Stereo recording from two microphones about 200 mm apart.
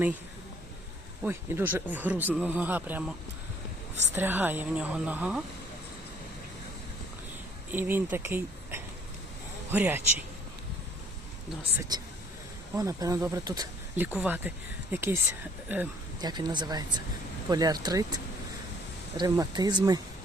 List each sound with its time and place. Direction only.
1.2 s speech: 10° right (ahead or behind)
4.1 s speech: 10° right (ahead or behind)
7.7 s speech: 10° right (ahead or behind)
11.8 s speech: 20° right (ahead or behind)
16.2 s speech: 20° right (ahead or behind)